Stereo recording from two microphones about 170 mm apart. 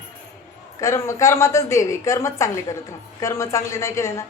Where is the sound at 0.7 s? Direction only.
15° left (ahead or behind).